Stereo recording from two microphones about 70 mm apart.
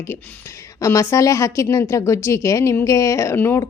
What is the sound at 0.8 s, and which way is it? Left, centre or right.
A woman's voice, left.